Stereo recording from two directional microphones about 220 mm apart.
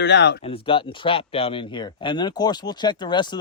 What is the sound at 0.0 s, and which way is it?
Speech, 50° left (ahead or behind).